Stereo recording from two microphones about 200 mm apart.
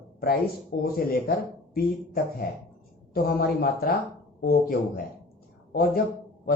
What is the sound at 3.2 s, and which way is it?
Speech, 45° left (ahead or behind).